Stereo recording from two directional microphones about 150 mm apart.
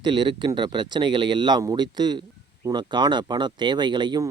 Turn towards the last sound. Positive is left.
turn(degrees=-30)  # may be behind; listen again after turning